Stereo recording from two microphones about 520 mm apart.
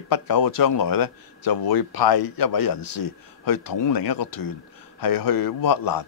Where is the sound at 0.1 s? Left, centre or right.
Left.